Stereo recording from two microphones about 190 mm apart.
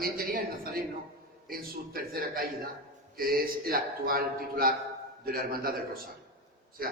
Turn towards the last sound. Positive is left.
turn(degrees=-50)  # may be behind; listen again after turning